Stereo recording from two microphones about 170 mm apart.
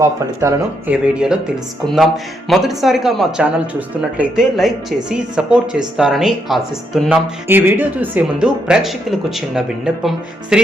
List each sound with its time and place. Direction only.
0.0 s speech: 15° right (ahead or behind)
1.0 s speech: 5° right (ahead or behind)
2.5 s speech: centre (ahead or behind)
7.4 s speech: 15° right (ahead or behind)